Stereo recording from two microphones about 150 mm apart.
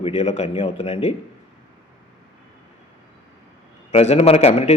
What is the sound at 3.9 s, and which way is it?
Speech, 45° left (ahead or behind).